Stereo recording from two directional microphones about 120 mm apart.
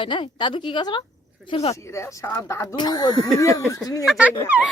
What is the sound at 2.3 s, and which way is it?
A woman's voice, 25° left (ahead or behind).